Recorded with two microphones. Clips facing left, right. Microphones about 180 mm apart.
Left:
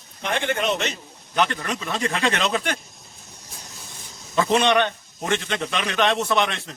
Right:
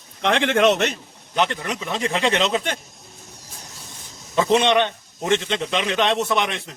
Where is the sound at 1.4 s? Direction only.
20° right (ahead or behind).